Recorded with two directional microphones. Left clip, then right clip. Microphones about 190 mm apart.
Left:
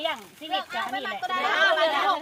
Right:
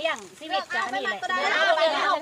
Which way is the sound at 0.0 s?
50° right (ahead or behind).